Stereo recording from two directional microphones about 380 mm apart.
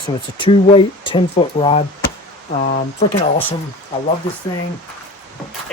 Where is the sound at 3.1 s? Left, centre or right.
Centre.